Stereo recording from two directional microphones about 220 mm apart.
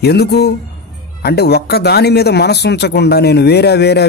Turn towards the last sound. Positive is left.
turn(degrees=50)  # may be behind; listen again after turning